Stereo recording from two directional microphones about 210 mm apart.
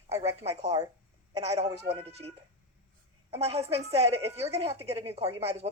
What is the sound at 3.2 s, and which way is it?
A woman's voice, 30° right (ahead or behind).